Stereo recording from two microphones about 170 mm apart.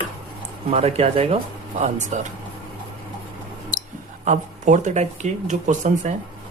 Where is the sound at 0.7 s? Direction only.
35° right (ahead or behind).